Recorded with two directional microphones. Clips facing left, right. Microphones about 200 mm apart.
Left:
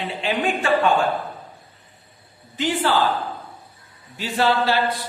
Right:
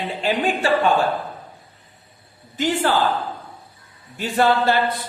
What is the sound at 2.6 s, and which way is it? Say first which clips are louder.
Speech: right 1 dB; 45° right (ahead or behind).